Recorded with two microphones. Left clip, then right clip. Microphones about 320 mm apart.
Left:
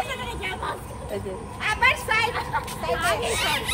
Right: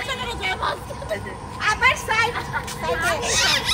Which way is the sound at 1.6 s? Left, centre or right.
Right.